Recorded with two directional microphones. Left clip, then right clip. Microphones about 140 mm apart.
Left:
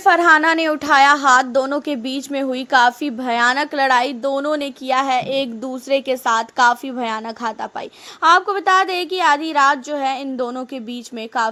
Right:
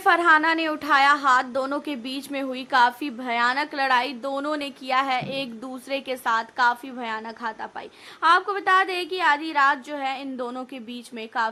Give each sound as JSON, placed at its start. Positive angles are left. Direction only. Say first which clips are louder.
{"t": 0.2, "sound": "a woman's voice", "louder": "left 5 dB", "side_deg": 45}